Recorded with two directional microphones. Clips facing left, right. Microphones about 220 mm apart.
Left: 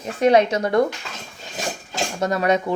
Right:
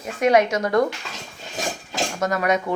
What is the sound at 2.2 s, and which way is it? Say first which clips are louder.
Speech: left 2 dB; 30° left (ahead or behind).